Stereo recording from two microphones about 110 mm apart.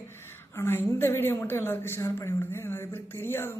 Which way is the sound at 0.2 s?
20° left (ahead or behind).